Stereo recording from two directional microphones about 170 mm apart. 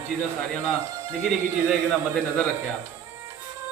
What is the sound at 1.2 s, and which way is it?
Speech, centre (ahead or behind).